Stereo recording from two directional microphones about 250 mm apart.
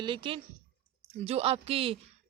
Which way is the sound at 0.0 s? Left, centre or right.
Centre.